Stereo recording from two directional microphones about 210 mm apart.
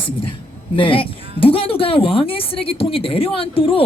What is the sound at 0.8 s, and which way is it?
Speech, 25° left (ahead or behind).